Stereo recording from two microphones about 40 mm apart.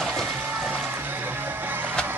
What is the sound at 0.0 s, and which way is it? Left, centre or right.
Music, centre.